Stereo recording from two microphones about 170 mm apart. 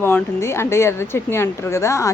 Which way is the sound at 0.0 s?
15° left (ahead or behind).